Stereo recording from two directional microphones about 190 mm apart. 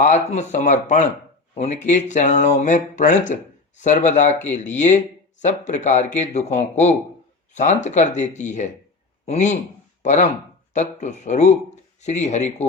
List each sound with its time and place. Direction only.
0.0 s speech: 40° left (ahead or behind)